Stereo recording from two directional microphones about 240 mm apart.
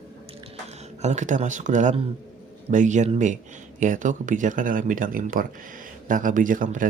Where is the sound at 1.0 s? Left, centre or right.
Right.